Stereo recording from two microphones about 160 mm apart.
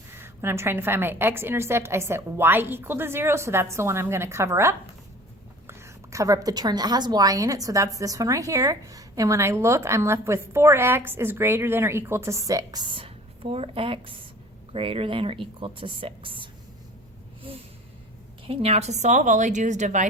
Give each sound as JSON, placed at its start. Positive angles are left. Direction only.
{"t": 0.1, "sound": "a woman's voice", "side_deg": -15}
{"t": 18.4, "sound": "a woman's voice", "side_deg": -40}